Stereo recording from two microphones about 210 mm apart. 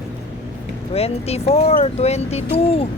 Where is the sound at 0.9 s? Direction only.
30° left (ahead or behind).